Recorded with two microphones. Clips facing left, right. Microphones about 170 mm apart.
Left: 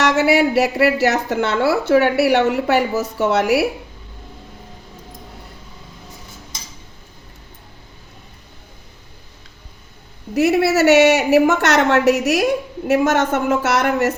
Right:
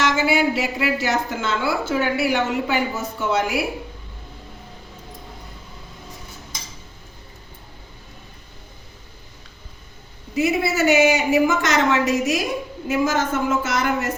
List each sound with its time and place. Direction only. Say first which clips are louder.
0.0 s a woman's voice: left 4 dB; 70° left (ahead or behind)
10.3 s a woman's voice: left 5 dB; 70° left (ahead or behind)